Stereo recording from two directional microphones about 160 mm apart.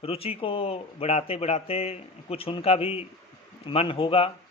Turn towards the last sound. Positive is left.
turn(degrees=35)  # may be behind; listen again after turning